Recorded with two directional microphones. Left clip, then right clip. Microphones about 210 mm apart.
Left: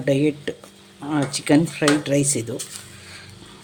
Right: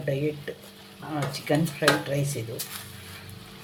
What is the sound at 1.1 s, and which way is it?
Speech, 55° left (ahead or behind).